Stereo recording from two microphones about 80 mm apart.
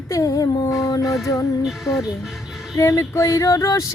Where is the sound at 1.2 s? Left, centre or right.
Left.